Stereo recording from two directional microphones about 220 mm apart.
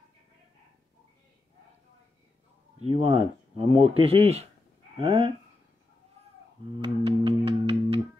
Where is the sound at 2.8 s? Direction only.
25° right (ahead or behind).